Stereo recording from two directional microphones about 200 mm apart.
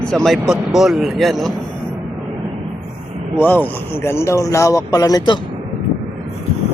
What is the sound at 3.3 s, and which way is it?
Speech, 10° left (ahead or behind).